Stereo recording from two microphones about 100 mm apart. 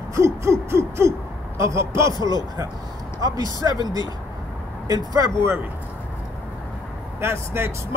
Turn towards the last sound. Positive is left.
turn(degrees=-25)  # may be behind; listen again after turning